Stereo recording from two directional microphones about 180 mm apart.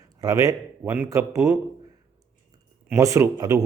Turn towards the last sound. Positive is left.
turn(degrees=-20)  # may be behind; listen again after turning